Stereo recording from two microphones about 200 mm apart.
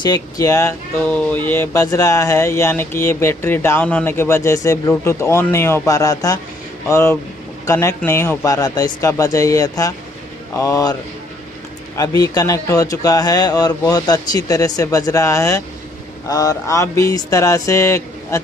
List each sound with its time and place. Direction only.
0.0 s speech: 20° left (ahead or behind)
12.0 s speech: 15° left (ahead or behind)